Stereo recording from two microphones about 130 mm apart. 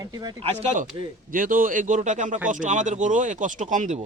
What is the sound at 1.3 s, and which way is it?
A man's voice, 90° right.